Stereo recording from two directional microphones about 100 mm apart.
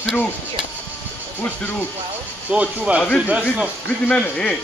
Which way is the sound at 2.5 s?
10° right (ahead or behind).